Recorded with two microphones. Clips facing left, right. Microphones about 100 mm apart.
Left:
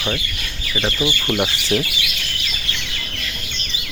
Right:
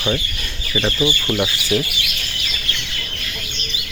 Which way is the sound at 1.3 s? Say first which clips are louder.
Even; 15° left (ahead or behind).